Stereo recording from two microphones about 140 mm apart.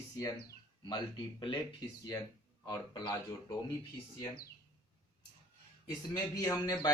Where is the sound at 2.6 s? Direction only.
30° left (ahead or behind).